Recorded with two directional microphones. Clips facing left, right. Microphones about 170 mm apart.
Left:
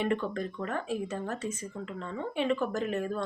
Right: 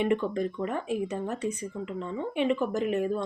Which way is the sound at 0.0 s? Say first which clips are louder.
Right 4 dB; 15° right (ahead or behind).